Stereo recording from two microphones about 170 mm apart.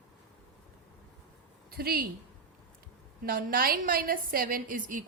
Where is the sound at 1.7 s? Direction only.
65° right (ahead or behind).